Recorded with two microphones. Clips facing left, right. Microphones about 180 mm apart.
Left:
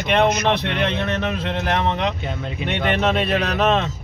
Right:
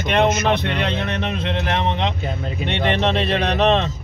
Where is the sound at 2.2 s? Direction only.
35° right (ahead or behind).